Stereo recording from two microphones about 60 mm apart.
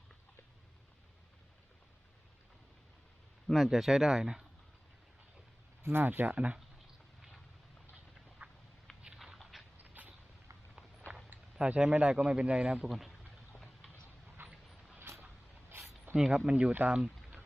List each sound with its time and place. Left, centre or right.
3.4 s speech: centre
5.8 s speech: right
8.4 s a sound: right
9.1 s dog: centre
9.7 s a sound: right
11.5 s speech: centre
14.4 s a sound: right
14.9 s vehicle: right
16.1 s speech: centre